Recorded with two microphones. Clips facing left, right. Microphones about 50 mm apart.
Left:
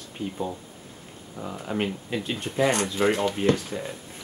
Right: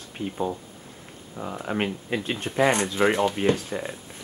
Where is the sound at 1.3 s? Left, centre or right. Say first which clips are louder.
Right 1 dB; centre.